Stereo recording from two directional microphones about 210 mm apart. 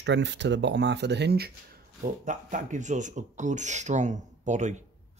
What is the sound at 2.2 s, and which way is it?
Speech, 35° right (ahead or behind).